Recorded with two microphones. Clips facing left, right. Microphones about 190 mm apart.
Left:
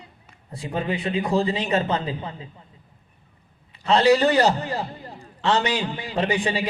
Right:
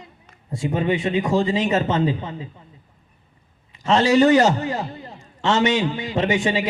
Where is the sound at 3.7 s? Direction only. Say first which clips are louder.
Right 1 dB; 35° left (ahead or behind).